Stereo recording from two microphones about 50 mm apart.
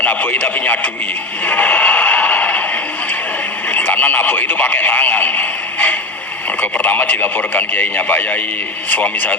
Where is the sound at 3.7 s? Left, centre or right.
Left.